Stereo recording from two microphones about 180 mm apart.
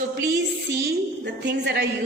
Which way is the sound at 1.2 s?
70° right (ahead or behind).